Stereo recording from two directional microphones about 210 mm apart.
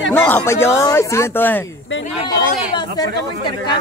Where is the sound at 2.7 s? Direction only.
20° left (ahead or behind).